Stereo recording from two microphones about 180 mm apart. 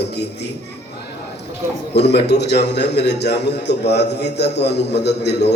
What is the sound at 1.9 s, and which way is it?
A man's voice, 65° left (ahead or behind).